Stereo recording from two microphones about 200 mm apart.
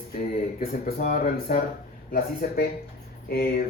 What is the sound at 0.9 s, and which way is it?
A man's voice, 45° left (ahead or behind).